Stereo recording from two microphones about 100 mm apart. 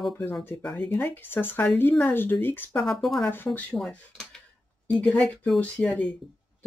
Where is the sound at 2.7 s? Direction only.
Centre (ahead or behind).